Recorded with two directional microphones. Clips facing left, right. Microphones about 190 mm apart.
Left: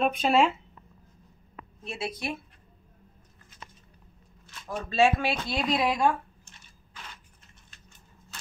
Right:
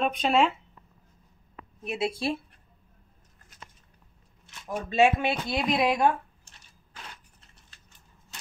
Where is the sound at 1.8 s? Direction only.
20° right (ahead or behind).